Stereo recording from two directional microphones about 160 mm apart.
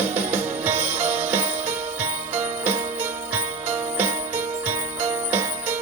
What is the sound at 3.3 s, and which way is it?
Jingle bell, 15° right (ahead or behind).